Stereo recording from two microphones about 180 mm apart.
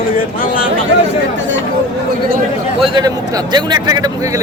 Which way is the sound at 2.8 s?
25° right (ahead or behind).